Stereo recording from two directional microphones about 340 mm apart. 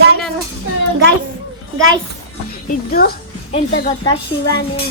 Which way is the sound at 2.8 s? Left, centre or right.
Left.